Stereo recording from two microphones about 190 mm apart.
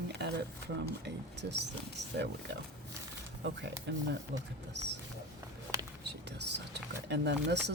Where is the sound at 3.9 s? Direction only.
65° right (ahead or behind).